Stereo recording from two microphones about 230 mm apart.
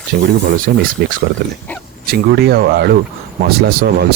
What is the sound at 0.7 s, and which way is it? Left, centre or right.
Speech, right.